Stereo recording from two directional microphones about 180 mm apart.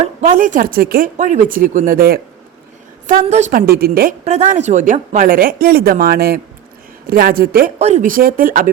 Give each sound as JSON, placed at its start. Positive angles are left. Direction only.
{"t": 0.2, "sound": "speech", "side_deg": -45}
{"t": 3.2, "sound": "a woman's voice", "side_deg": -40}
{"t": 3.7, "sound": "speech", "side_deg": -60}
{"t": 4.2, "sound": "speech", "side_deg": -40}
{"t": 7.8, "sound": "speech", "side_deg": -40}